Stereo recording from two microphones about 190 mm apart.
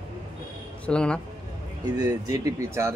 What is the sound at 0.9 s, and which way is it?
Speech, 5° left (ahead or behind).